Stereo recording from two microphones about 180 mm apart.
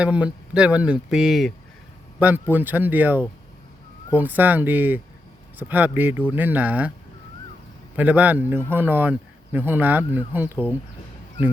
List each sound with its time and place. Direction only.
0.0 s speech: 5° right (ahead or behind)
7.9 s speech: 10° right (ahead or behind)